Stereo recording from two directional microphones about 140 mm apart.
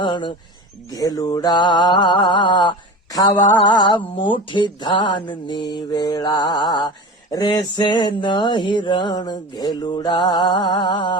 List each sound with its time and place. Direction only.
0.0 s mantra: 35° left (ahead or behind)